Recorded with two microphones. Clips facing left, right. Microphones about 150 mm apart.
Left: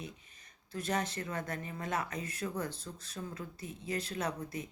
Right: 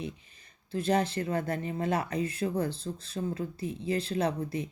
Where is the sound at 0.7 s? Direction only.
30° right (ahead or behind).